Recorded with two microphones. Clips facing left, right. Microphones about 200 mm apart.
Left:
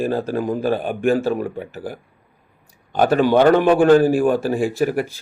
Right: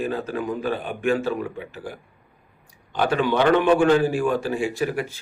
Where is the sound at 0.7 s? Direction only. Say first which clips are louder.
Left 4 dB; 50° left (ahead or behind).